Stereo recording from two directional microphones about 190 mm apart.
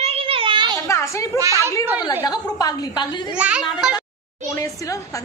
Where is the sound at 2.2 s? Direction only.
20° left (ahead or behind).